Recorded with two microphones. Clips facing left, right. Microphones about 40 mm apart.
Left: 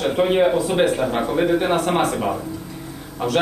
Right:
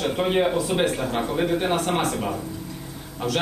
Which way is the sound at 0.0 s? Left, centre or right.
Centre.